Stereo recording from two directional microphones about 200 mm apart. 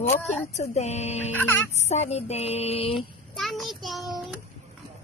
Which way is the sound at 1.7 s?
35° left (ahead or behind).